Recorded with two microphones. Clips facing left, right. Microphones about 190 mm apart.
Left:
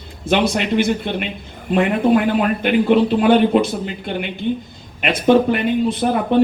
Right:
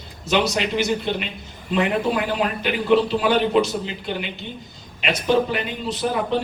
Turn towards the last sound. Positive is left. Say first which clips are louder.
# left 5 dB
turn(degrees=55)  # may be behind; listen again after turning